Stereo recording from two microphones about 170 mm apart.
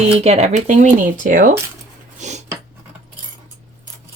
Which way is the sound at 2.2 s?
45° right (ahead or behind).